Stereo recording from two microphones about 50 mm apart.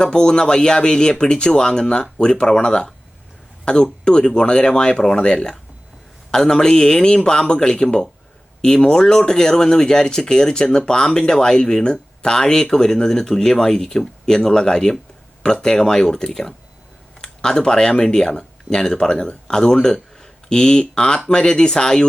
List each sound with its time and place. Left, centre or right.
0.0 s a man's voice: centre